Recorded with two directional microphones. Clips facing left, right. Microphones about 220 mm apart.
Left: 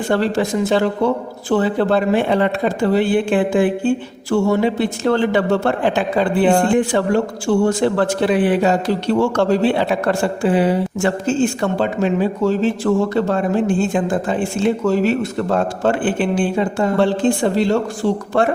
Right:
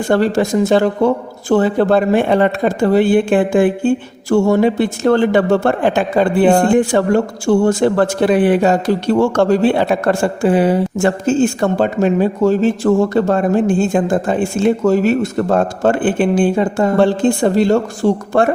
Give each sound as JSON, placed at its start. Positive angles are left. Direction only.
{"t": 0.1, "sound": "speech", "side_deg": -45}